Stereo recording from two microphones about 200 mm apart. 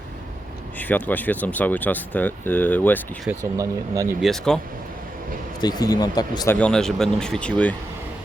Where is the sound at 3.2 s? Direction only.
15° right (ahead or behind).